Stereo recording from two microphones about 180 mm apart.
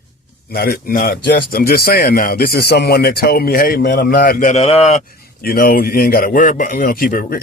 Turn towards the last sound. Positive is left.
turn(degrees=55)  # may be behind; listen again after turning